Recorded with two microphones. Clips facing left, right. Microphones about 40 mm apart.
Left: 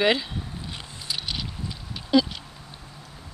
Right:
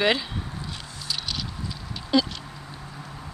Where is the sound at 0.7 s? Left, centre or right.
Centre.